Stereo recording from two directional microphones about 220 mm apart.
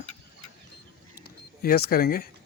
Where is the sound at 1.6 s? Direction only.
45° left (ahead or behind).